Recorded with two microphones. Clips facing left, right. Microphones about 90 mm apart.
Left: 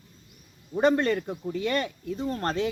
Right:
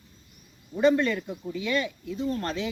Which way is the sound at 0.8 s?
45° left (ahead or behind).